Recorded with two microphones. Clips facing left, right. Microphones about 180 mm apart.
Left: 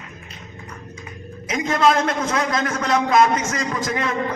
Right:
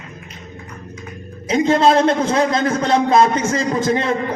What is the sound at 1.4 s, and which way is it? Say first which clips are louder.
A man's voice: right 5 dB; 30° right (ahead or behind).